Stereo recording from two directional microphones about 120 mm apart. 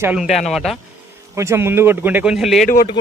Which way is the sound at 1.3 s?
25° right (ahead or behind).